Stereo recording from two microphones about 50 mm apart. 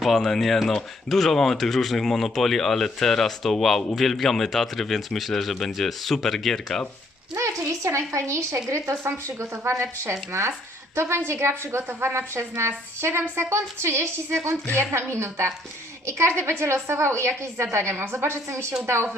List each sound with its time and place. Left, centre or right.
0.0 s speech: centre
7.3 s a woman's voice: right
9.4 s a woman's voice: right